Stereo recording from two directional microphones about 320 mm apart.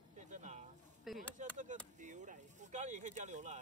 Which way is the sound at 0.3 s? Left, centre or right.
Right.